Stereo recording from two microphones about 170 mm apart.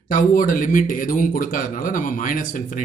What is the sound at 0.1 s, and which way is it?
Speech, 50° left (ahead or behind).